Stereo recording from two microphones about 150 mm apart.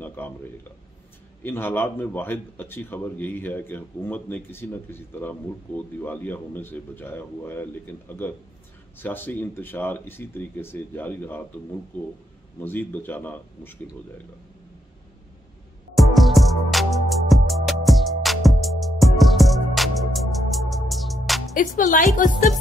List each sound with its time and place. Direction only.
0.0 s a sound: 10° left (ahead or behind)
1.4 s a man's voice: 15° left (ahead or behind)
12.6 s a man's voice: 10° left (ahead or behind)
16.0 s music: centre (ahead or behind)
21.5 s speech: 65° left (ahead or behind)